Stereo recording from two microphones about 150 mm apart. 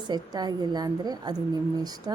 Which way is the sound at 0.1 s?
25° right (ahead or behind).